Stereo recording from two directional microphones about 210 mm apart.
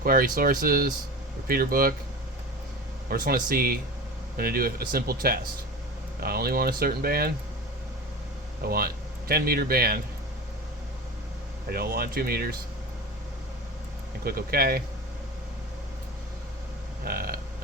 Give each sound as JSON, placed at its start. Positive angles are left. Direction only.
{"t": 0.0, "sound": "speech", "side_deg": -45}
{"t": 3.1, "sound": "speech", "side_deg": -45}
{"t": 8.6, "sound": "speech", "side_deg": -45}
{"t": 11.7, "sound": "speech", "side_deg": -45}
{"t": 14.3, "sound": "speech", "side_deg": -45}
{"t": 17.0, "sound": "a sound", "side_deg": -45}